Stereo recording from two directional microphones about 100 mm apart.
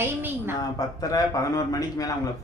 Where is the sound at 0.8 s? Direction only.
40° left (ahead or behind).